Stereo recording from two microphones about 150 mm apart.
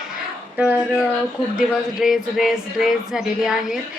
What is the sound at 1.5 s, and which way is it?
Music, centre (ahead or behind).